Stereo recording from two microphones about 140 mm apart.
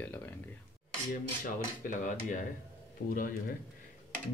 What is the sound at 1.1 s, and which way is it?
Speech, 70° left (ahead or behind).